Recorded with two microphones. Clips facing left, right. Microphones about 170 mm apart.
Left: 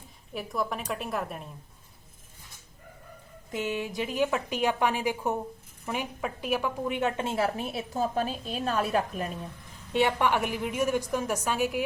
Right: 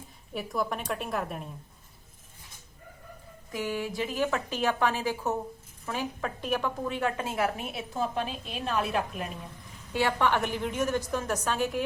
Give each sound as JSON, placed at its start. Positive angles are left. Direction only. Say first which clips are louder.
{"t": 0.3, "sound": "a woman's voice", "louder": "even", "side_deg": 0}
{"t": 3.5, "sound": "a woman's voice", "louder": "left 1 dB", "side_deg": 20}
{"t": 9.9, "sound": "a woman's voice", "louder": "left 1 dB", "side_deg": 20}